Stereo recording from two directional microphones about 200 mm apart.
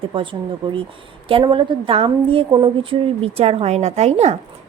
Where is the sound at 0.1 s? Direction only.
25° right (ahead or behind).